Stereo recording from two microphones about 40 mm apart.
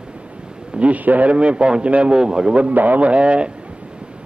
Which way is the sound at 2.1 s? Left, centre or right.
Right.